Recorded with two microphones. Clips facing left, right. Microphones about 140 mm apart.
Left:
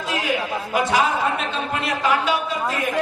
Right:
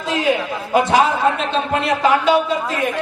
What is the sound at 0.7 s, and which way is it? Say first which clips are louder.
A man's voice: right 5 dB; 25° right (ahead or behind).